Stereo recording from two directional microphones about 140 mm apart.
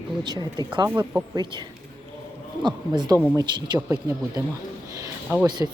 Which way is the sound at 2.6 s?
30° right (ahead or behind).